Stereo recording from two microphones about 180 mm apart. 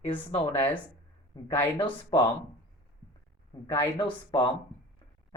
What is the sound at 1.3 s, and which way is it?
Speech, 25° left (ahead or behind).